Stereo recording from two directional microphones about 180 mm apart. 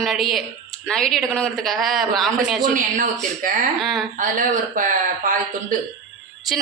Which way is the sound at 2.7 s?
45° right (ahead or behind).